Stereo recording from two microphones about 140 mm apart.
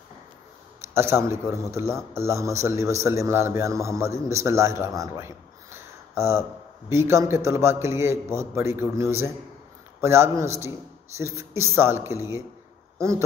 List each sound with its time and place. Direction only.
0.9 s a man's voice: 20° right (ahead or behind)